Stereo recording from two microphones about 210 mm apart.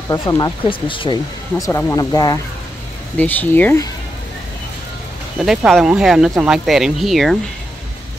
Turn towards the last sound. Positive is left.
turn(degrees=0)  # may be behind; listen again after turning